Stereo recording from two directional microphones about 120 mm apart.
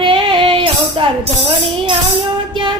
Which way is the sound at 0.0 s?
45° right (ahead or behind).